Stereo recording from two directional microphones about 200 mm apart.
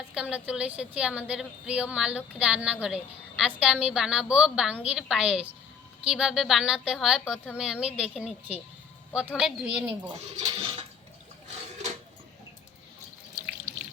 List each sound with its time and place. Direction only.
0.1 s a woman's voice: 5° right (ahead or behind)
10.3 s speech: 30° right (ahead or behind)